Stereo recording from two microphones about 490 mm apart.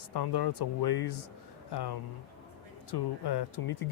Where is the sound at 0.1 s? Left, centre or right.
Left.